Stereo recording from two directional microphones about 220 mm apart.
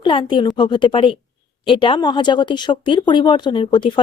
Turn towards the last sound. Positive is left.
turn(degrees=20)  # may be behind; listen again after turning